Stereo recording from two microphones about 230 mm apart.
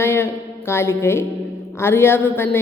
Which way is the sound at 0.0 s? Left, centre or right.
Centre.